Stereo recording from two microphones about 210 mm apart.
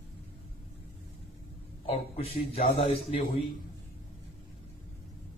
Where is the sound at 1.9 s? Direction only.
30° left (ahead or behind).